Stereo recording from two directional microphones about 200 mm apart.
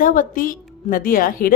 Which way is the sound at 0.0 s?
40° left (ahead or behind).